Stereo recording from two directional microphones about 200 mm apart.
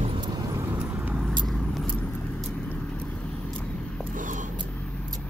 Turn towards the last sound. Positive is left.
turn(degrees=-40)  # may be behind; listen again after turning